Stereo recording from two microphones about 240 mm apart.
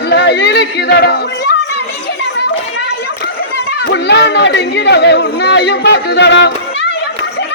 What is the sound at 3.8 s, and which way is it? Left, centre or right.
Speech, left.